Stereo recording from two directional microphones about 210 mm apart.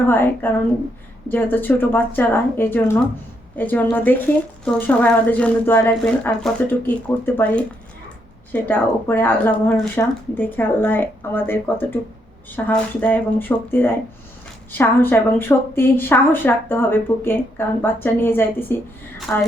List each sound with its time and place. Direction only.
0.0 s a woman's voice: 10° left (ahead or behind)